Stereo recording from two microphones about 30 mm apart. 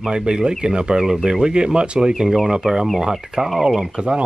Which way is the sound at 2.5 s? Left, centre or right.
Right.